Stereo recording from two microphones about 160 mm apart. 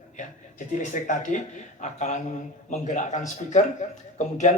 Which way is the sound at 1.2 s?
50° left (ahead or behind).